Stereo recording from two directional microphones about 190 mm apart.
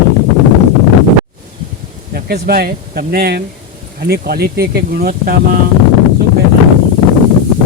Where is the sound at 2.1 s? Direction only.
55° right (ahead or behind).